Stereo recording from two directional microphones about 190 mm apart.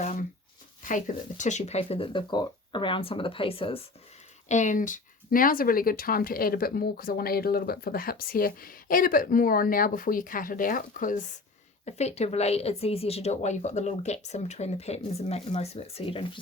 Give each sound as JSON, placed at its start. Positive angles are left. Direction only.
{"t": 0.0, "sound": "shuffling cards", "side_deg": 40}
{"t": 0.9, "sound": "speech", "side_deg": 45}
{"t": 4.4, "sound": "speech", "side_deg": 40}